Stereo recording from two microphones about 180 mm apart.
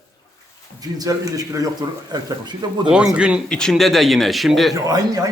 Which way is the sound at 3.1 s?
5° right (ahead or behind).